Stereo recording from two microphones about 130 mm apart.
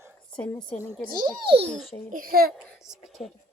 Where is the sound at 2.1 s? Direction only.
90° right.